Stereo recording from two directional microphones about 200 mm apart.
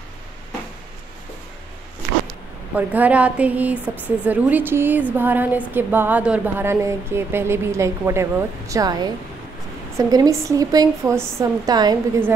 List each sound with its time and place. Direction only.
2.7 s a woman's voice: 5° right (ahead or behind)